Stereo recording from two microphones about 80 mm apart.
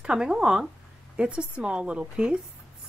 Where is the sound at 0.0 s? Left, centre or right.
Centre.